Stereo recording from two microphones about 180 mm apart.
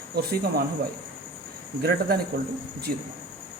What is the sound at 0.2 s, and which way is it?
Speech, 60° right (ahead or behind).